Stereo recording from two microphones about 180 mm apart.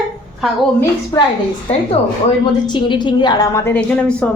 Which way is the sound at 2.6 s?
25° left (ahead or behind).